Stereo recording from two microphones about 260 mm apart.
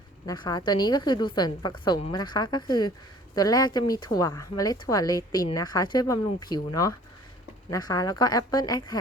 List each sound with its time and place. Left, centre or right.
0.3 s speech: centre